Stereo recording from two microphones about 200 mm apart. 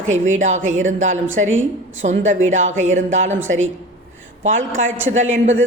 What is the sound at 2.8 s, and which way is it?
Speech, 35° right (ahead or behind).